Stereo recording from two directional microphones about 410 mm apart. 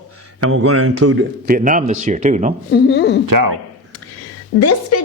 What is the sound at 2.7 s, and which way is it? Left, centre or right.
Speech, left.